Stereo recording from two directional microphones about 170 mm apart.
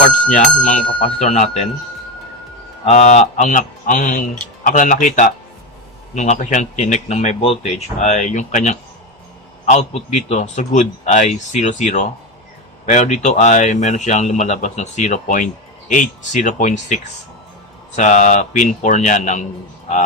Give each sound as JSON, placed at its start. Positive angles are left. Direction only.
{"t": 0.3, "sound": "speech", "side_deg": 50}
{"t": 0.9, "sound": "speech", "side_deg": 40}
{"t": 2.8, "sound": "speech", "side_deg": 45}